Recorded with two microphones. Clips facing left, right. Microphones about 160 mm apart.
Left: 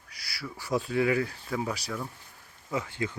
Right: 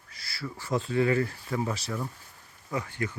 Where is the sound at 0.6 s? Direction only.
Centre (ahead or behind).